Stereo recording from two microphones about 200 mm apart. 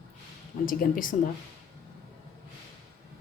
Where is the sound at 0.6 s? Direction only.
45° left (ahead or behind).